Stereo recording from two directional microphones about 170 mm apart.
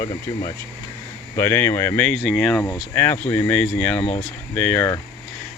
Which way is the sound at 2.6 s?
15° left (ahead or behind).